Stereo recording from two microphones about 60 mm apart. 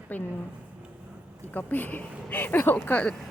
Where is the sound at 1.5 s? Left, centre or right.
Left.